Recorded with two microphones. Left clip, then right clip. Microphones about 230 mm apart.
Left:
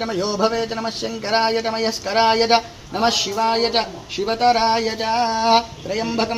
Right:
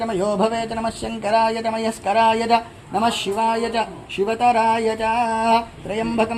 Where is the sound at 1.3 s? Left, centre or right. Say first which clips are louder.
Even; right.